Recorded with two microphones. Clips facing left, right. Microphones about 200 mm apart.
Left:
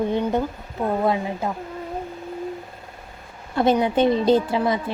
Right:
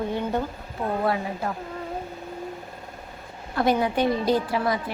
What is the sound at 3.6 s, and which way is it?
Speech, 25° left (ahead or behind).